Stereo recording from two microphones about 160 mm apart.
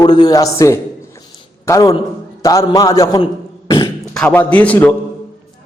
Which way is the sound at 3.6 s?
20° left (ahead or behind).